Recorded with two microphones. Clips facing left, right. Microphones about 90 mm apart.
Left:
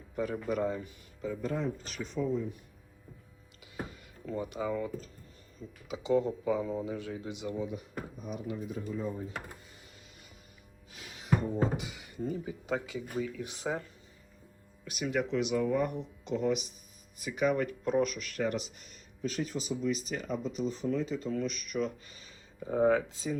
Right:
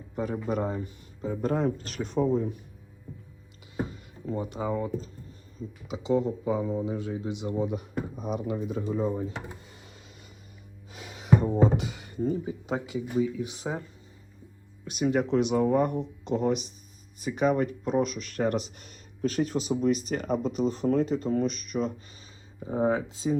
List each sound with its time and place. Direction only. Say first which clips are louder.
0.4 s speech: right 2 dB; 30° right (ahead or behind)
1.4 s speech: right 8 dB; 50° right (ahead or behind)
2.2 s speech: right 6 dB; 45° right (ahead or behind)
3.8 s a sound: right 8 dB; 30° right (ahead or behind)
5.9 s speech: right 2 dB; 20° right (ahead or behind)
7.6 s speech: right 7 dB; 65° right (ahead or behind)
8.1 s speech: right 7 dB; 85° right
11.8 s speech: right 7 dB; 45° right (ahead or behind); by 13.0 s 25° right (ahead or behind)
13.1 s speech: right 10 dB; 15° right (ahead or behind)
14.8 s speech: right 6 dB; 30° right (ahead or behind)
18.4 s speech: right 6 dB; 50° right (ahead or behind); by 19.7 s 65° right (ahead or behind)
19.8 s speech: right 6 dB; 55° right (ahead or behind); by 23.4 s 25° right (ahead or behind)